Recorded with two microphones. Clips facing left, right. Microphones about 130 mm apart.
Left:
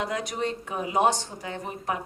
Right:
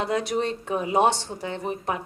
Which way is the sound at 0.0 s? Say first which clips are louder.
Right 4 dB; 30° right (ahead or behind).